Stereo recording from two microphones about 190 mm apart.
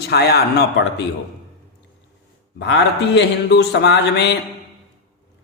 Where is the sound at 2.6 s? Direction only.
65° left (ahead or behind).